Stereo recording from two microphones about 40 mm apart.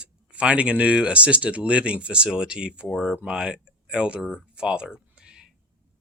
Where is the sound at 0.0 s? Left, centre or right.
Right.